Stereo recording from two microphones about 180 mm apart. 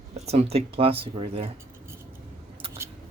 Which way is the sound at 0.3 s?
35° right (ahead or behind).